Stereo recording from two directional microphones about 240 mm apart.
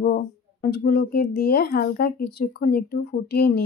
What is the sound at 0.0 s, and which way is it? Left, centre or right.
Speech, left.